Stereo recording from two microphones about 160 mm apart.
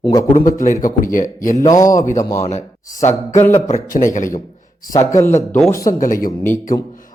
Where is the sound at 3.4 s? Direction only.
15° left (ahead or behind).